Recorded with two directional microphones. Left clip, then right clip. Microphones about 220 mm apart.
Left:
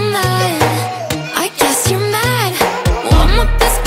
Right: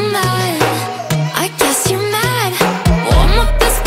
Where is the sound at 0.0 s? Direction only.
Centre (ahead or behind).